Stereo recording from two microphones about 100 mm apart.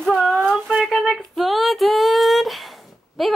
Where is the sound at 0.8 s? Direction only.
Centre (ahead or behind).